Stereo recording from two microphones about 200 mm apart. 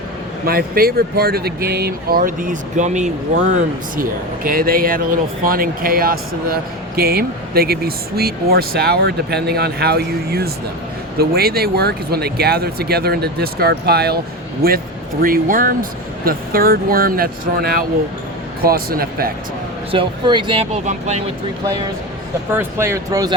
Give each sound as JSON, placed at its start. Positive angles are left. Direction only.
{"t": 0.4, "sound": "speech", "side_deg": -50}
{"t": 4.4, "sound": "speech", "side_deg": -45}
{"t": 19.9, "sound": "speech", "side_deg": -25}
{"t": 22.5, "sound": "speech", "side_deg": -10}